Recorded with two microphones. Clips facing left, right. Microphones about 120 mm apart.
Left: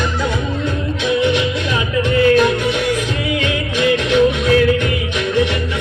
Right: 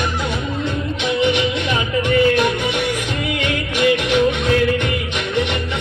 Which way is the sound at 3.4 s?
15° right (ahead or behind).